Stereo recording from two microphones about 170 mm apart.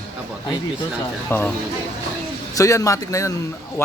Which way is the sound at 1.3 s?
15° left (ahead or behind).